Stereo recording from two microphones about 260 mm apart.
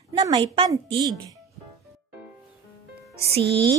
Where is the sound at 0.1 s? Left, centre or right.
Centre.